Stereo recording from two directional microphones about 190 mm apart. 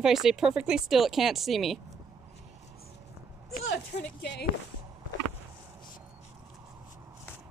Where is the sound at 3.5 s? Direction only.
60° left (ahead or behind).